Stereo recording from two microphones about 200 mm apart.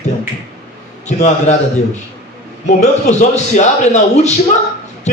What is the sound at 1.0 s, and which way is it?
Speech, 35° left (ahead or behind).